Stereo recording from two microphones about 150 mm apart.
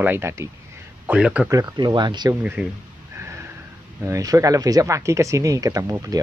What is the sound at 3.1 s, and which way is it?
Snort, 15° right (ahead or behind).